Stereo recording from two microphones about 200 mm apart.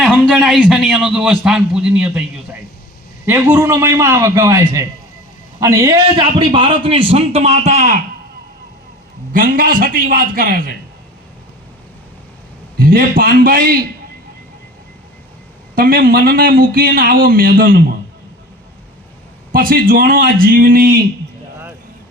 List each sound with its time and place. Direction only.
0.0 s a man's voice: 5° right (ahead or behind); by 8.0 s 35° right (ahead or behind)
9.3 s speech: 45° right (ahead or behind)
12.8 s speech: 45° right (ahead or behind)
15.7 s speech: 45° right (ahead or behind)
19.5 s speech: 45° right (ahead or behind)